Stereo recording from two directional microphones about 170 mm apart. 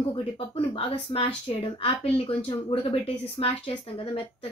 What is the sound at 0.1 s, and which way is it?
Speech, 35° left (ahead or behind).